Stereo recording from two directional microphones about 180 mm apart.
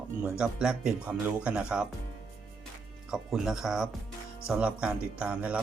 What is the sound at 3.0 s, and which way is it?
Speech, centre (ahead or behind).